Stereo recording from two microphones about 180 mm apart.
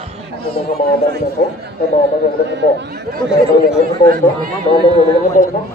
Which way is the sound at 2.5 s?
70° right (ahead or behind).